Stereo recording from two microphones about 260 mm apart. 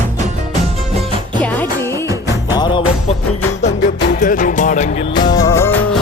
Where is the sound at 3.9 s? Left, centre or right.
Left.